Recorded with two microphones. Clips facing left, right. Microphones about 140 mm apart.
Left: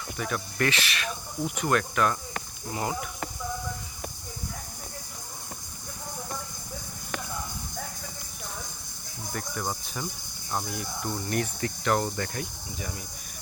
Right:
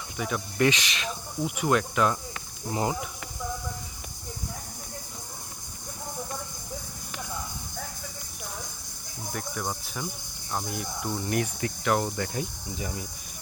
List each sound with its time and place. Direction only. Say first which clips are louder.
0.2 s speech: right 3 dB; 15° right (ahead or behind)
9.3 s cricket: even; 5° right (ahead or behind)
10.5 s speech: even; centre (ahead or behind)
12.4 s speech: right 3 dB; 25° right (ahead or behind)